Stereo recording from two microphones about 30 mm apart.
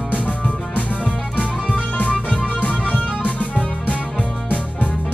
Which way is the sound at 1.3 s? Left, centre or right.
Left.